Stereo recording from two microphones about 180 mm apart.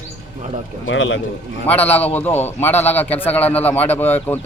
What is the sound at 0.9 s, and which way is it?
Speech, 90° left.